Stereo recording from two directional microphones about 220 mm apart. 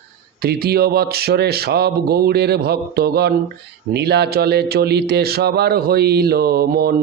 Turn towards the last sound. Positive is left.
turn(degrees=-45)  # may be behind; listen again after turning